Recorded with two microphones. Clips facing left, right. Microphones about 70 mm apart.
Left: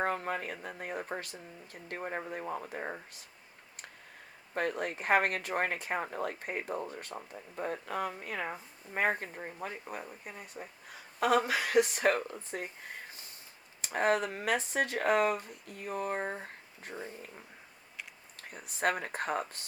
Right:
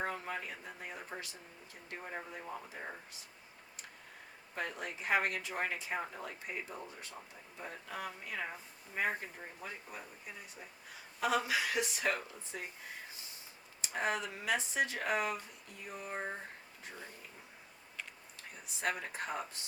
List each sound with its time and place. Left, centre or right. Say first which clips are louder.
0.0 s a sound: left 6 dB; left
0.8 s speech: left 9 dB; left
4.5 s speech: left 7 dB; left
13.1 s snort: left 2 dB; left
13.8 s speech: left 7 dB; left
18.3 s speech: left 9 dB; left